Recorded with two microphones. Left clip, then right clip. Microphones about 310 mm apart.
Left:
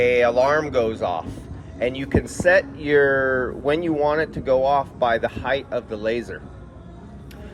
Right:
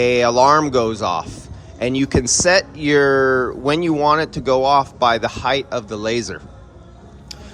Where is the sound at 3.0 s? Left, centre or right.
Left.